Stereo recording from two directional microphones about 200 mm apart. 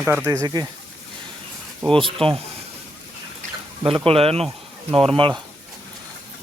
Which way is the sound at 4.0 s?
30° right (ahead or behind).